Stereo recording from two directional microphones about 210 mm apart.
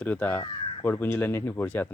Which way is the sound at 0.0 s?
10° left (ahead or behind).